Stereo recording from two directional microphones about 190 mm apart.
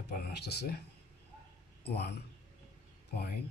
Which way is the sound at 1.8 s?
60° left (ahead or behind).